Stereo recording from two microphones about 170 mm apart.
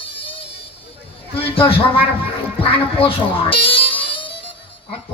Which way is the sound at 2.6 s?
35° left (ahead or behind).